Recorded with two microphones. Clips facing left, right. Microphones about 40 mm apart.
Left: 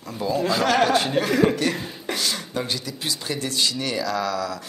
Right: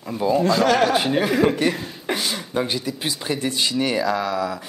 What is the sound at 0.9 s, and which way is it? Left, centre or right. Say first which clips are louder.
Speech: right 1 dB; centre.